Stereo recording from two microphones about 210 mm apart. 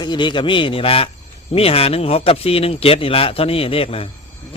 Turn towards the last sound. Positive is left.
turn(degrees=25)  # may be behind; listen again after turning